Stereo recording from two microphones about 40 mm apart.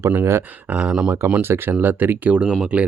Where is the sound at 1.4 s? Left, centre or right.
Right.